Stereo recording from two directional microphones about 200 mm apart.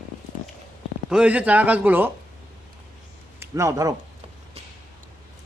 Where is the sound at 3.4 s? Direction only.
15° right (ahead or behind).